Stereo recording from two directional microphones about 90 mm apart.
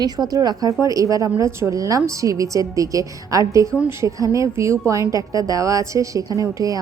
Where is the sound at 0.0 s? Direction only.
45° right (ahead or behind).